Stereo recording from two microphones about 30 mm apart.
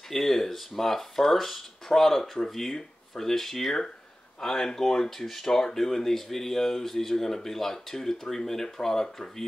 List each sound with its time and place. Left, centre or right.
0.1 s speech: centre